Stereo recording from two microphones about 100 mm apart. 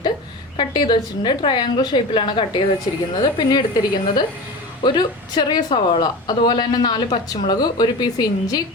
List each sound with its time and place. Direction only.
0.5 s a woman's voice: 50° left (ahead or behind)
5.7 s a woman's voice: 60° left (ahead or behind)
6.2 s a woman's voice: 50° left (ahead or behind)